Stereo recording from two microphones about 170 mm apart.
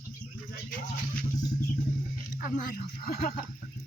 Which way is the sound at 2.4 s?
55° left (ahead or behind).